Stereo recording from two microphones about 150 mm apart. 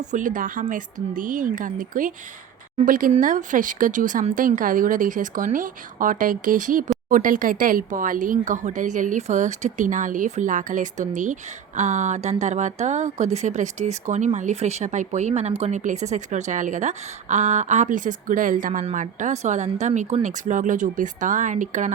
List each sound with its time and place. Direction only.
0.1 s speech: 60° right (ahead or behind)